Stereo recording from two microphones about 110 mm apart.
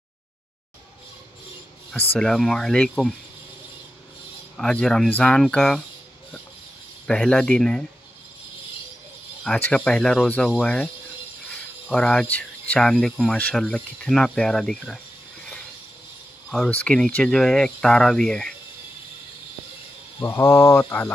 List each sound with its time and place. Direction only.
2.1 s speech: 5° left (ahead or behind)
4.6 s speech: 5° left (ahead or behind)
7.1 s speech: 5° left (ahead or behind)
9.6 s speech: 10° left (ahead or behind)
16.4 s speech: 10° left (ahead or behind)
20.2 s speech: 30° left (ahead or behind)